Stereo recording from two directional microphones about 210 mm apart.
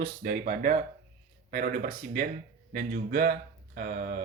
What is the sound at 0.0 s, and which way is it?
Speech, 40° right (ahead or behind).